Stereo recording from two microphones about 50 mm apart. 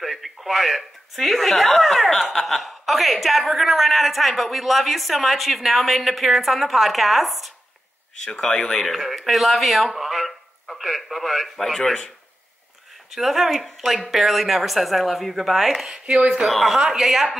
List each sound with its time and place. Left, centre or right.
0.0 s a woman's voice: centre
8.2 s speech: centre
8.8 s speech: centre
13.1 s a woman's voice: centre
16.2 s speech: right
16.4 s a woman's voice: centre